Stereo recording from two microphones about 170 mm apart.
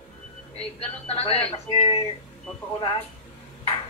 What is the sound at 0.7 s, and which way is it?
Speech, 35° left (ahead or behind).